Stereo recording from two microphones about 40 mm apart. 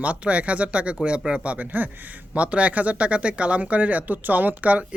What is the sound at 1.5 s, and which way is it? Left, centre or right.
Speech, right.